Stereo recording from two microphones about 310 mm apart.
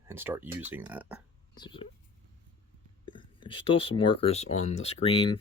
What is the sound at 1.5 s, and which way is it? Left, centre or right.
Speech, centre.